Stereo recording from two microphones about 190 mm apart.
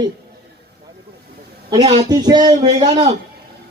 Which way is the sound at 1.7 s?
35° right (ahead or behind).